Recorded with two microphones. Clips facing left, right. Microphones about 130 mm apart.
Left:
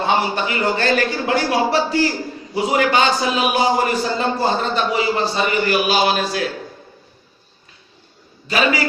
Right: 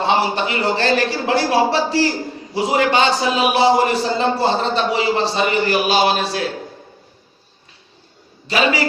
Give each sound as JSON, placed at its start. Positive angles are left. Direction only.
{"t": 0.0, "sound": "a man's voice", "side_deg": -35}
{"t": 8.4, "sound": "a man's voice", "side_deg": -35}